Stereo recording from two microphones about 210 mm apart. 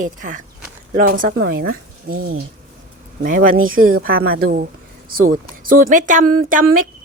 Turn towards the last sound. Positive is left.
turn(degrees=-40)  # may be behind; listen again after turning